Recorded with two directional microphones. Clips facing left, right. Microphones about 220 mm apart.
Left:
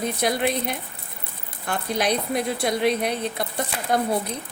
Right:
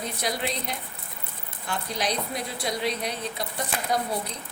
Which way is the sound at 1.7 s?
55° left (ahead or behind).